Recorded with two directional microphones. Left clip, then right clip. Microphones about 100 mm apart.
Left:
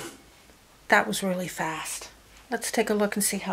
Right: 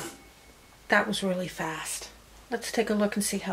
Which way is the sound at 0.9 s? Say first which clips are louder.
Left 3 dB; 40° left (ahead or behind).